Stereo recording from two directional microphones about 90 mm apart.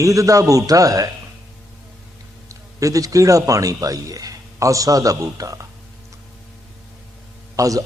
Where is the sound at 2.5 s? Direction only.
40° right (ahead or behind).